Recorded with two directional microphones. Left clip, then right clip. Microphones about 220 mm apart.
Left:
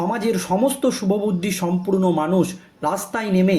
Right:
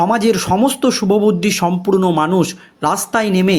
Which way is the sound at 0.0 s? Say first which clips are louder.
Right 8 dB; 45° right (ahead or behind).